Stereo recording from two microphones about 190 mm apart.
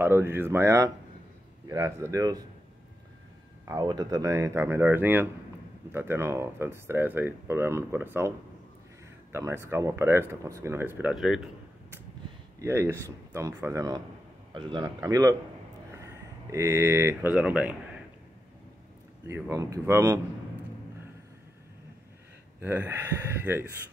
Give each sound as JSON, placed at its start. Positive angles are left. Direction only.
{"t": 0.0, "sound": "speech", "side_deg": -10}
{"t": 3.6, "sound": "speech", "side_deg": -20}
{"t": 9.3, "sound": "speech", "side_deg": -15}
{"t": 12.5, "sound": "a man's voice", "side_deg": -15}
{"t": 19.2, "sound": "speech", "side_deg": -15}
{"t": 22.6, "sound": "speech", "side_deg": -10}